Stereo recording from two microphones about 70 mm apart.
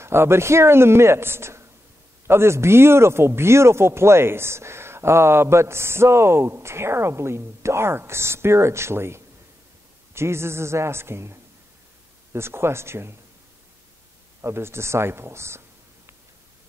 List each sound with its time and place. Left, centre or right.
0.0 s speech: right
14.4 s speech: right